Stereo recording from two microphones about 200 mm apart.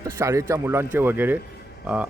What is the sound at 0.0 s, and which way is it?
A man's voice, 15° right (ahead or behind).